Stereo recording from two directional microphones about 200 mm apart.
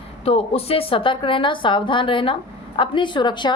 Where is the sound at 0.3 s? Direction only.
30° left (ahead or behind).